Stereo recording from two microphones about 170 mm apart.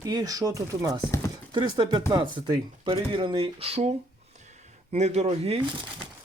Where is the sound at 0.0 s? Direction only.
20° right (ahead or behind); by 5.5 s 40° right (ahead or behind).